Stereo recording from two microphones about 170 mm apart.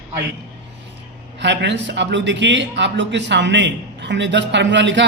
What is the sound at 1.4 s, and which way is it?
Speech, 90° right.